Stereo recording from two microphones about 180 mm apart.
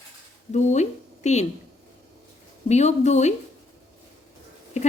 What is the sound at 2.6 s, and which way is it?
Speech, 40° left (ahead or behind).